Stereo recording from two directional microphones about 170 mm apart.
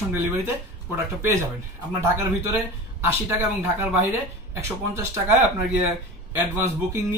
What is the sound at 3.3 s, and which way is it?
Speech, 15° right (ahead or behind).